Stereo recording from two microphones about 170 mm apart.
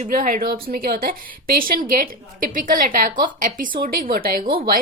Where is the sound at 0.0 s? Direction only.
50° right (ahead or behind).